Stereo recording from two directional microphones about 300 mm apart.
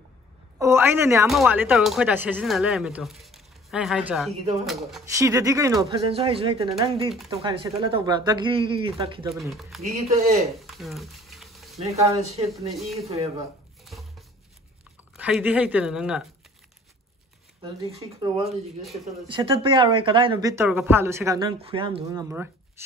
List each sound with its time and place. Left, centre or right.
0.6 s speech: centre
5.3 s speech: centre
10.0 s speech: right
10.7 s a sound: centre
11.8 s speech: right
12.5 s speech: centre
13.9 s a sound: centre
15.1 s speech: centre
17.9 s speech: centre